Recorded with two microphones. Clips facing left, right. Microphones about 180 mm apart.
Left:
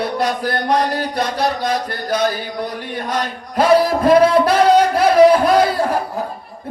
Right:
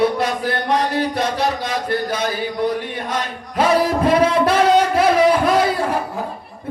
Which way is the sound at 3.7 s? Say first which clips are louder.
Left 4 dB; 40° left (ahead or behind).